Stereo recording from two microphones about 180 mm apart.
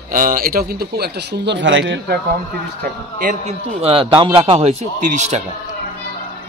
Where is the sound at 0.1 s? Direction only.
50° right (ahead or behind); by 2.1 s 90° right.